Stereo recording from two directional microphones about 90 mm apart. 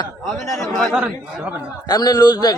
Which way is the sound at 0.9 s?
15° right (ahead or behind).